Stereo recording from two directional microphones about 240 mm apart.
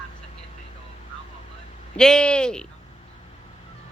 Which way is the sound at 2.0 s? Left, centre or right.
Centre.